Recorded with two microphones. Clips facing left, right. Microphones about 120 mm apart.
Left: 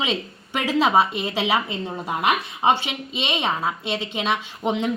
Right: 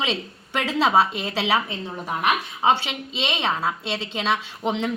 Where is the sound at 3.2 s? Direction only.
10° left (ahead or behind).